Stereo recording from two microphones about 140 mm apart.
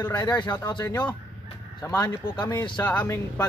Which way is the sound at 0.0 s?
30° left (ahead or behind).